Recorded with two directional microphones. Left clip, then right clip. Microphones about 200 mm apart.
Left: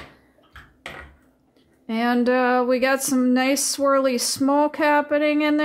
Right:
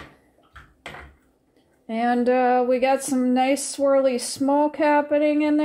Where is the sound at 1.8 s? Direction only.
5° left (ahead or behind).